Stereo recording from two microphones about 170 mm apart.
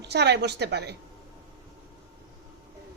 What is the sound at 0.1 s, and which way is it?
Speech, 80° right.